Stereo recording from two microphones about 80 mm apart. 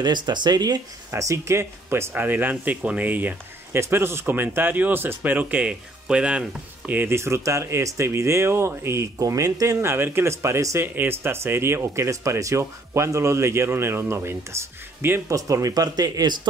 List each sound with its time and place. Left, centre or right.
0.0 s speech: right
1.1 s speech: right; by 6.5 s centre
6.9 s speech: right
7.2 s speech: right
9.8 s speech: right
15.2 s speech: right